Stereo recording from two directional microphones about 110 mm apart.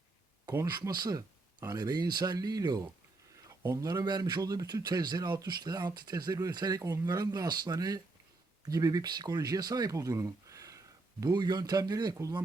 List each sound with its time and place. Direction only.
0.7 s speech: 40° right (ahead or behind)
3.8 s speech: 40° right (ahead or behind)